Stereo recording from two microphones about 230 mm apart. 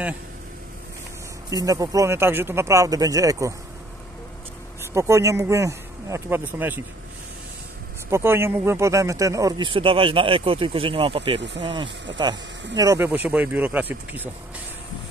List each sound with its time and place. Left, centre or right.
1.5 s speech: centre
4.9 s speech: centre
8.1 s speech: centre